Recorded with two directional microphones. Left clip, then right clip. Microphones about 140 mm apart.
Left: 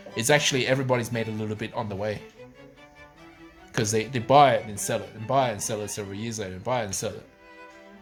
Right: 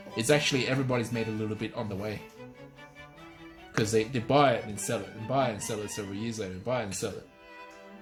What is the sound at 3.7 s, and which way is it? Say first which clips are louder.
Speech: left 1 dB; 35° left (ahead or behind).